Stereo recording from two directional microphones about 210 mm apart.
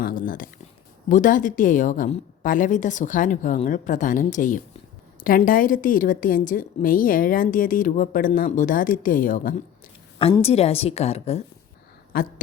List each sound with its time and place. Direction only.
0.0 s a woman's voice: 40° left (ahead or behind)
10.2 s a woman's voice: 25° left (ahead or behind)
12.1 s a woman's voice: 45° left (ahead or behind)